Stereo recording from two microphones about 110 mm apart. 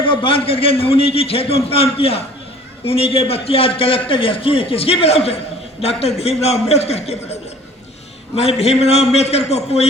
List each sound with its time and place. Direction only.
0.0 s a man's voice: 50° left (ahead or behind); by 7.0 s 70° left (ahead or behind)
8.4 s a man's voice: 75° left (ahead or behind)